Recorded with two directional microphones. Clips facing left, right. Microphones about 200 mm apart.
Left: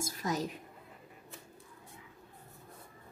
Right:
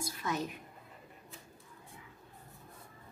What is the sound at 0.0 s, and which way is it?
Speech, 40° left (ahead or behind).